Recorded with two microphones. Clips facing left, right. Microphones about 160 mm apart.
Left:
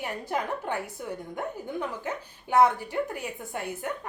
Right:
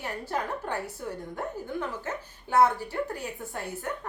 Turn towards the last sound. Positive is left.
turn(degrees=15)  # may be behind; listen again after turning